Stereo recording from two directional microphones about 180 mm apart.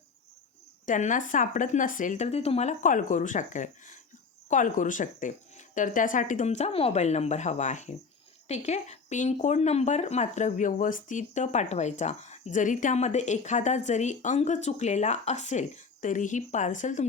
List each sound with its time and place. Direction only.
0.9 s speech: 45° left (ahead or behind)